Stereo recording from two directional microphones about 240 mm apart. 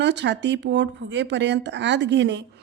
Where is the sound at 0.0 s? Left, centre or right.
Right.